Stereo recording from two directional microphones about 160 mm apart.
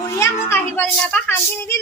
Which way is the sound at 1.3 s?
15° left (ahead or behind).